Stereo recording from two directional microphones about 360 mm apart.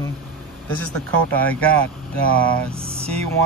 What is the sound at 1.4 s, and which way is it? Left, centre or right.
Speech, centre.